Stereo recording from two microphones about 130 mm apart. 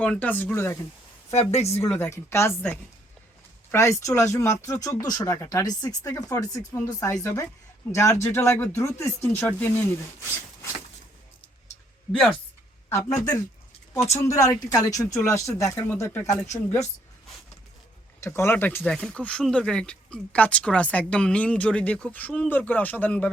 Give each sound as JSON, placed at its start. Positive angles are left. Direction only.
{"t": 0.0, "sound": "speech", "side_deg": 10}
{"t": 1.3, "sound": "speech", "side_deg": 55}
{"t": 1.8, "sound": "speech", "side_deg": 20}
{"t": 12.1, "sound": "speech", "side_deg": 5}
{"t": 12.9, "sound": "speech", "side_deg": 30}
{"t": 18.2, "sound": "speech", "side_deg": 20}